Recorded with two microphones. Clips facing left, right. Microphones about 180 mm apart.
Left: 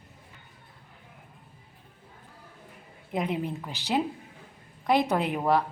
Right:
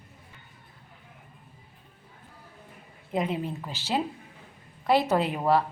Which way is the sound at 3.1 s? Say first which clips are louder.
Right 1 dB; 10° left (ahead or behind).